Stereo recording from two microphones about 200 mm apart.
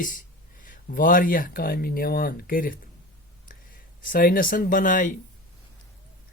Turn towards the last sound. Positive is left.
turn(degrees=40)  # may be behind; listen again after turning